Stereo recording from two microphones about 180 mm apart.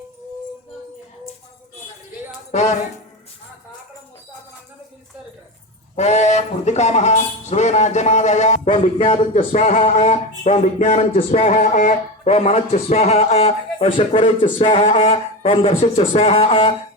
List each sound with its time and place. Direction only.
2.5 s speech: 40° left (ahead or behind)
6.0 s a man's voice: 40° left (ahead or behind)